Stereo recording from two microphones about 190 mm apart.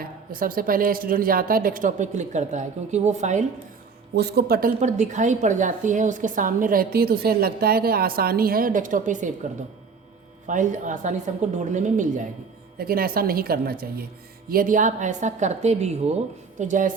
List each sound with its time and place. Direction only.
0.0 s a woman's voice: 50° right (ahead or behind)
4.1 s speech: 55° right (ahead or behind)
4.8 s a woman's voice: 40° right (ahead or behind)
10.4 s a woman's voice: 45° right (ahead or behind)
12.7 s a woman's voice: 50° right (ahead or behind)